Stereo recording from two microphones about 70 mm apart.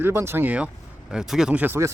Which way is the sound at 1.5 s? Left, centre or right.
Right.